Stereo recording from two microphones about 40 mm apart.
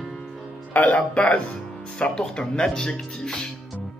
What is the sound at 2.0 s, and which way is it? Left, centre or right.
Speech, left.